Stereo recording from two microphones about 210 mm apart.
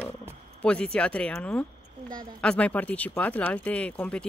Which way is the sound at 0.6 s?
5° left (ahead or behind).